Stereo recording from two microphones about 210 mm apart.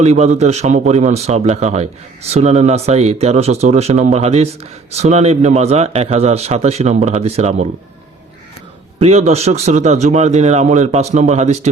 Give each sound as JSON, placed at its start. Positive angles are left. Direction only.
{"t": 0.0, "sound": "a man's voice", "side_deg": -30}
{"t": 9.0, "sound": "a man's voice", "side_deg": -30}